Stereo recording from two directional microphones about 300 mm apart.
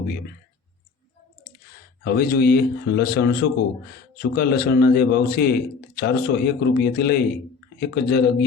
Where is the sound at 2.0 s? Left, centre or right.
Left.